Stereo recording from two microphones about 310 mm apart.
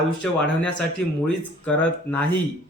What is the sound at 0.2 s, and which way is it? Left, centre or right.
Speech, centre.